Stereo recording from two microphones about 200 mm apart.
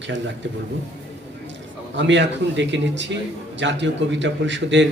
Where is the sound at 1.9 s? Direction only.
65° right (ahead or behind).